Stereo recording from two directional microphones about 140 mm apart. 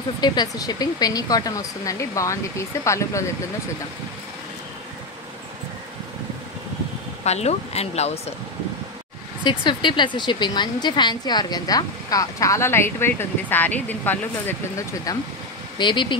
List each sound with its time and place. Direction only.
0.2 s speech: 30° left (ahead or behind)
7.2 s speech: 50° left (ahead or behind)
9.4 s speech: 30° left (ahead or behind); by 14.2 s 10° left (ahead or behind)
15.8 s speech: 35° left (ahead or behind)